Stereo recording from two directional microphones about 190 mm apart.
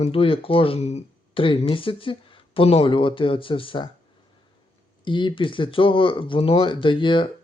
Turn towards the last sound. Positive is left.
turn(degrees=25)  # may be behind; listen again after turning